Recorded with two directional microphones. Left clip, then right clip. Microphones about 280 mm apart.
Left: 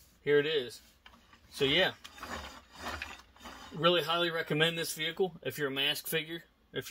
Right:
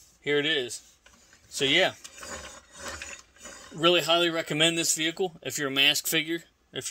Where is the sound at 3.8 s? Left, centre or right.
Right.